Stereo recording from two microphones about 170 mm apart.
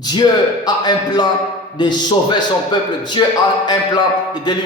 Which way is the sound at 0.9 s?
25° left (ahead or behind).